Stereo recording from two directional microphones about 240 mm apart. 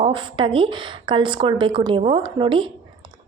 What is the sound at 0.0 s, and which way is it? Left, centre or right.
A woman's voice, right.